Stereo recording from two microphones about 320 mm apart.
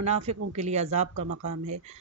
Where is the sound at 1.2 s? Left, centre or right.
Right.